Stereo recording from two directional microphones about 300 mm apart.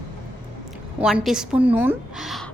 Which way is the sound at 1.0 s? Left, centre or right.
Centre.